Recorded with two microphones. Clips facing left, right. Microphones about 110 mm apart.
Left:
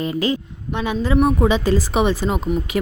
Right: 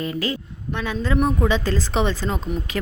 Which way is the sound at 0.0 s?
20° left (ahead or behind).